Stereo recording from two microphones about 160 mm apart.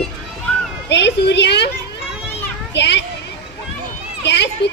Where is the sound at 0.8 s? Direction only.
90° left.